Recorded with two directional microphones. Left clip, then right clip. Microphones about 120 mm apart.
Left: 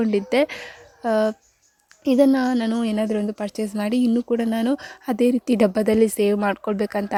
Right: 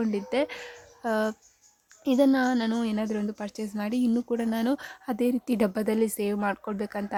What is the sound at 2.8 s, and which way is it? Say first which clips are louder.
Speech: left 7 dB; 35° left (ahead or behind).